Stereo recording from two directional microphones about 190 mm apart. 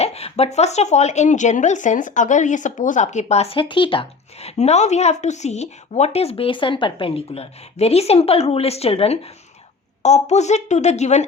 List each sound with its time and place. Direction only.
0.0 s a woman's voice: 35° left (ahead or behind)